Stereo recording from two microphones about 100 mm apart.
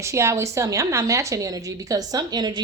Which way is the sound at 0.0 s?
30° right (ahead or behind).